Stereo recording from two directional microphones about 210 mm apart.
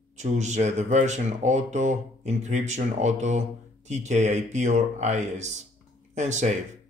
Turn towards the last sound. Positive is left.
turn(degrees=-35)  # may be behind; listen again after turning